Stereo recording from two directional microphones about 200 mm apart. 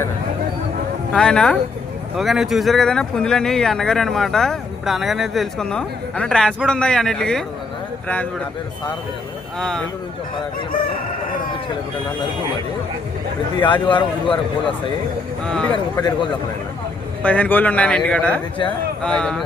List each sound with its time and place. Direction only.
1.1 s speech: 5° left (ahead or behind)
9.6 s speech: 5° left (ahead or behind)
13.6 s a man's voice: 25° left (ahead or behind)
15.4 s speech: 5° left (ahead or behind)
15.7 s a man's voice: 20° left (ahead or behind)
17.2 s speech: 5° left (ahead or behind)